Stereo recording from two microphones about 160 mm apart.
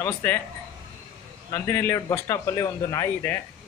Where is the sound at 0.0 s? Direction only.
10° left (ahead or behind).